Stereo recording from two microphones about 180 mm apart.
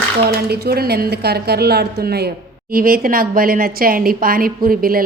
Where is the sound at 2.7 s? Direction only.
55° right (ahead or behind).